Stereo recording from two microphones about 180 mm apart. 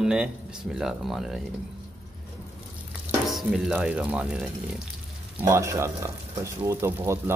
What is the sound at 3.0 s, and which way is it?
Speech, centre (ahead or behind).